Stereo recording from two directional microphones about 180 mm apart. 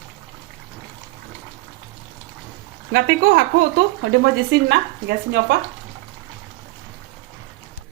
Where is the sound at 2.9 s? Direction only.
60° right (ahead or behind).